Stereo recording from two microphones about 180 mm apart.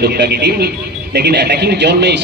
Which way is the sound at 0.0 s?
65° right (ahead or behind).